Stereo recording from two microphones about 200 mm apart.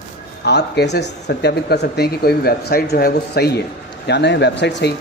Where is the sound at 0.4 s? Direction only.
55° left (ahead or behind).